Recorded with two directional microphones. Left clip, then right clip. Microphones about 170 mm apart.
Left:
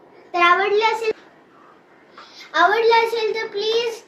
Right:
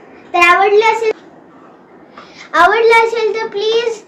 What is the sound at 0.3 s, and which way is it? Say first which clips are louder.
Child singing: right 7 dB; 40° left (ahead or behind).